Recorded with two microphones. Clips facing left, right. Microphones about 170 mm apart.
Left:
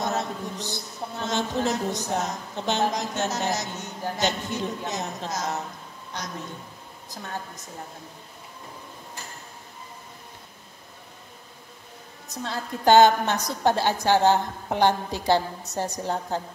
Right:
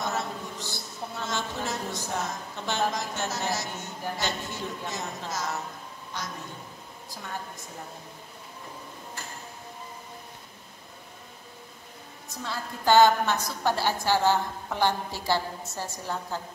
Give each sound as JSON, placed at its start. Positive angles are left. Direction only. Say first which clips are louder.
{"t": 0.0, "sound": "a woman's voice", "louder": "left 4 dB", "side_deg": 20}
{"t": 12.3, "sound": "a woman's voice", "louder": "left 4 dB", "side_deg": 20}